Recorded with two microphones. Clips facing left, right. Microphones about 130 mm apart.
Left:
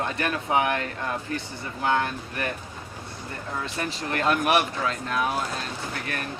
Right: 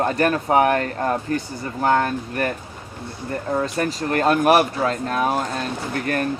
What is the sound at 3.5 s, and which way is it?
Speech, 40° right (ahead or behind).